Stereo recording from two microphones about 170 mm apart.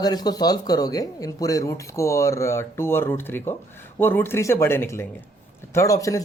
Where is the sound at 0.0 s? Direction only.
25° left (ahead or behind).